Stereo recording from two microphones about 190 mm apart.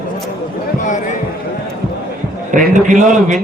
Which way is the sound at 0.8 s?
40° left (ahead or behind).